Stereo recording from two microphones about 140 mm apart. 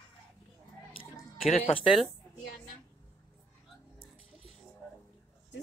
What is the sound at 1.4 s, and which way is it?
Speech, 45° left (ahead or behind).